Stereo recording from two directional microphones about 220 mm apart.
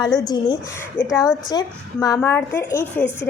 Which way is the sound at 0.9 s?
15° left (ahead or behind).